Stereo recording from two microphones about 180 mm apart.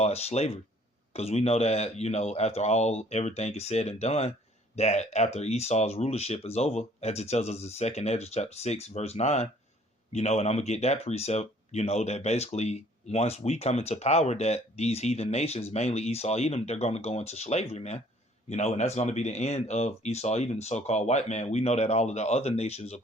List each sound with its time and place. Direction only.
0.0 s speech: 35° left (ahead or behind)